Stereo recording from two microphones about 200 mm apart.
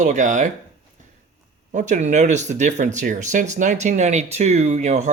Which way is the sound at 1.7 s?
40° right (ahead or behind).